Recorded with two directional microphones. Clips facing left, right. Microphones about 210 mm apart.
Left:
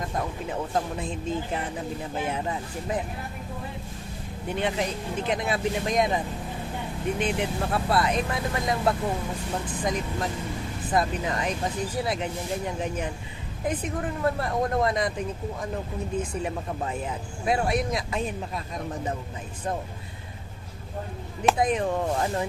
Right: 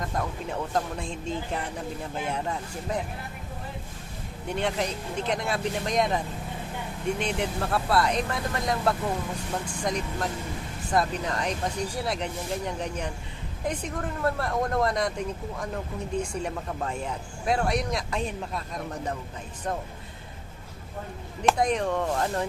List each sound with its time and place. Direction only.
0.5 s speech: 5° left (ahead or behind)
2.3 s speech: 5° left (ahead or behind)
4.5 s speech: centre (ahead or behind)
16.1 s speech: 5° left (ahead or behind)
21.4 s speech: 5° left (ahead or behind)